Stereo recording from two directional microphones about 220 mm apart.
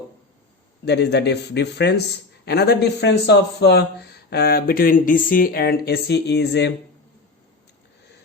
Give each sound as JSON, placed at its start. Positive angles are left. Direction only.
{"t": 0.9, "sound": "speech", "side_deg": 50}